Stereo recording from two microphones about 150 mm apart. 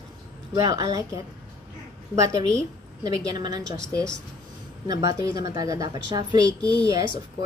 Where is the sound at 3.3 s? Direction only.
25° right (ahead or behind).